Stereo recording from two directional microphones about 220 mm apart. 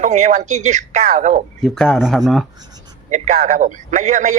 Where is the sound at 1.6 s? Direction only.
Centre (ahead or behind).